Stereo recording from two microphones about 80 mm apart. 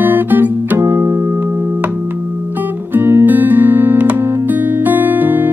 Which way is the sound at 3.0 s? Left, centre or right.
Right.